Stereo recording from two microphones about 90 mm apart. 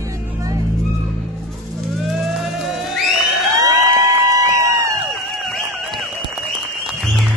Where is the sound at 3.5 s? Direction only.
40° right (ahead or behind).